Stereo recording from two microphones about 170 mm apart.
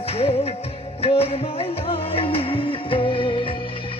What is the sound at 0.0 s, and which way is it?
Music, 35° left (ahead or behind).